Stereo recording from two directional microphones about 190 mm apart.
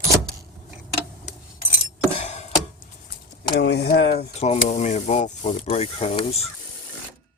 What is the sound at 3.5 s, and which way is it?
Speech, 60° left (ahead or behind).